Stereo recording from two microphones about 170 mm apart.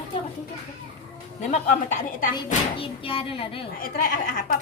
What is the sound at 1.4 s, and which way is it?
Speech, 45° left (ahead or behind).